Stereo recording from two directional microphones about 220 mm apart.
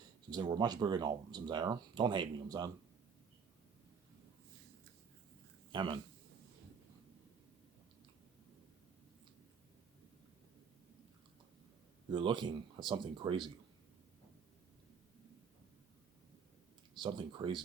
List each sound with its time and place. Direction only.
0.3 s speech: 20° right (ahead or behind)
5.7 s speech: 20° right (ahead or behind)
12.1 s speech: 20° right (ahead or behind)
16.9 s speech: 20° right (ahead or behind)